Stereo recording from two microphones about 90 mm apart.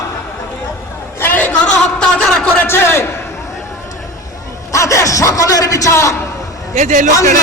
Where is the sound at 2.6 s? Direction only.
25° left (ahead or behind).